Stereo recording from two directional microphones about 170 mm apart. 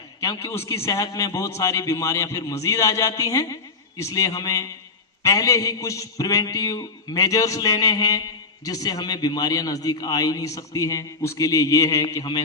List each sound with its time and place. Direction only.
0.2 s a man's voice: 15° left (ahead or behind)